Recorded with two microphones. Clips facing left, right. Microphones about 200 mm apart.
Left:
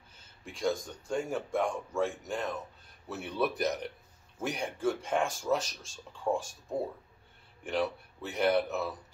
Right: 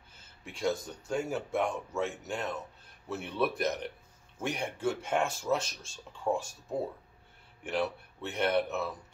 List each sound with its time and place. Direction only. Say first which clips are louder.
0.5 s speech: even; 5° right (ahead or behind)
7.6 s speech: left 1 dB; centre (ahead or behind)